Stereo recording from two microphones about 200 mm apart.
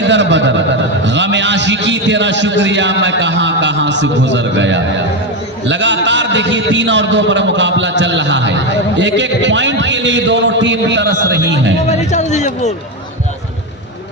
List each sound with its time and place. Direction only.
0.0 s a sound: 65° right (ahead or behind)
5.6 s a man's voice: 65° right (ahead or behind)
11.9 s a man's voice: 35° left (ahead or behind)